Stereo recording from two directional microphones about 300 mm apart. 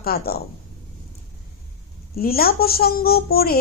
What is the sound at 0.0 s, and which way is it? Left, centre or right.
Speech, left.